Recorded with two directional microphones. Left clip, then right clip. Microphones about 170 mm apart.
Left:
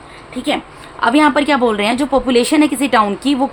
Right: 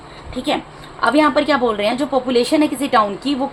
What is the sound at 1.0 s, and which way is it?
A woman's voice, 35° left (ahead or behind).